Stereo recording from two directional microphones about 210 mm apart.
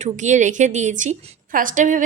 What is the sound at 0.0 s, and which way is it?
A woman's voice, 35° right (ahead or behind).